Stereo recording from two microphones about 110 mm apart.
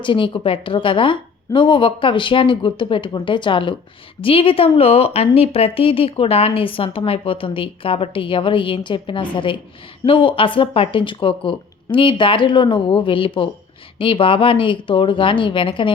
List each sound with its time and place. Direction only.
0.0 s a woman's voice: 50° left (ahead or behind)